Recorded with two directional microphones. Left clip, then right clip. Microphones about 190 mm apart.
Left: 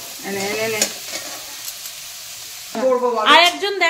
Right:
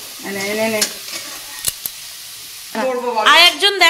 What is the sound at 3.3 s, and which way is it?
Speech, 5° right (ahead or behind).